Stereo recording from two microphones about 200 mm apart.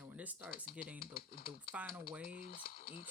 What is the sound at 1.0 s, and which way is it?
Speech, 45° left (ahead or behind).